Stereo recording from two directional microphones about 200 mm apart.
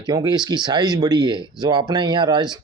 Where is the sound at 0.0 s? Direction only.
20° right (ahead or behind).